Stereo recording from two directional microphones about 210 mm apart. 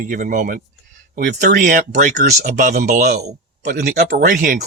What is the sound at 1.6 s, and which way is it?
Speech, 35° right (ahead or behind).